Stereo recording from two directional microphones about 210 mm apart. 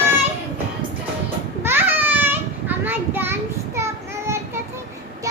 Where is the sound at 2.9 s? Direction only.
10° right (ahead or behind).